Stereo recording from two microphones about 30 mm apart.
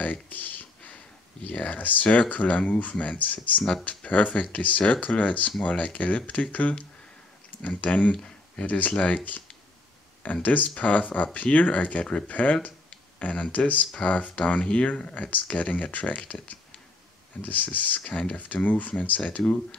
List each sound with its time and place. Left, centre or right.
0.0 s a sound: left
2.0 s speech: left
8.6 s speech: left
15.1 s speech: left
17.4 s speech: left